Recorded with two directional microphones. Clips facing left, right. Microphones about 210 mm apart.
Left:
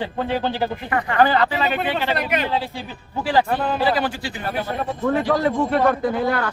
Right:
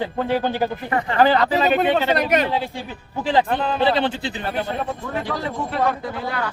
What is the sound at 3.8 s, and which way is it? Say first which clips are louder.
Speech: right 2 dB; 25° right (ahead or behind).